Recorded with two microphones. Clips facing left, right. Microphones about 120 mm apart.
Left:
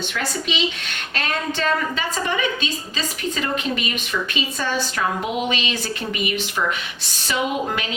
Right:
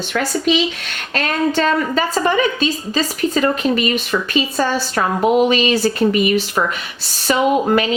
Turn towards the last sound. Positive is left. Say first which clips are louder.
# right 8 dB
turn(degrees=-45)  # may be behind; listen again after turning